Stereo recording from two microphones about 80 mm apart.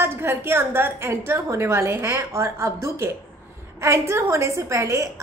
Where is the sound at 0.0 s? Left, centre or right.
Right.